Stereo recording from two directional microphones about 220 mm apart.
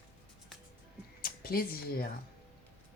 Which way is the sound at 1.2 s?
40° left (ahead or behind).